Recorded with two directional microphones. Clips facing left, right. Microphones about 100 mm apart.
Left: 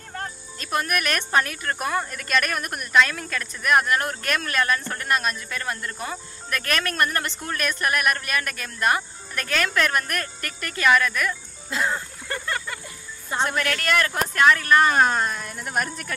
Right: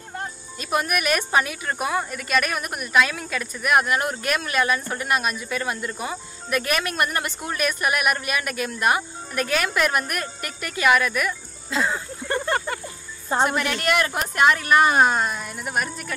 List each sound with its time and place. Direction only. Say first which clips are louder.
0.1 s speech: right 1 dB; 10° right (ahead or behind)
12.4 s music: right 6 dB; 35° right (ahead or behind)
13.4 s speech: right 2 dB; 15° right (ahead or behind)